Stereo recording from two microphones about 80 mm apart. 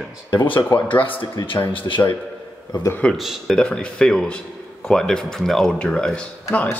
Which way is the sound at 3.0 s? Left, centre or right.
Centre.